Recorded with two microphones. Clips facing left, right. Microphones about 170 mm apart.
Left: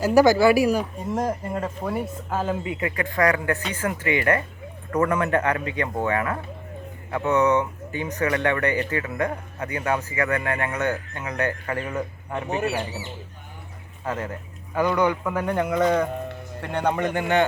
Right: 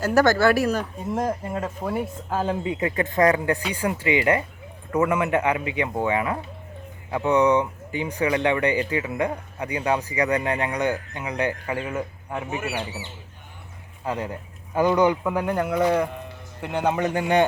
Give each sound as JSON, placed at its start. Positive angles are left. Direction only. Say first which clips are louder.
{"t": 0.0, "sound": "speech", "louder": "left 2 dB", "side_deg": 0}
{"t": 2.5, "sound": "a man's voice", "louder": "right 1 dB", "side_deg": -25}
{"t": 12.5, "sound": "speech", "louder": "left 6 dB", "side_deg": 35}
{"t": 14.0, "sound": "a man's voice", "louder": "right 1 dB", "side_deg": -15}